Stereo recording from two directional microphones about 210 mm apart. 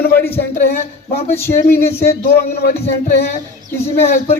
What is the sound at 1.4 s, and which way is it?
Speech, 10° left (ahead or behind).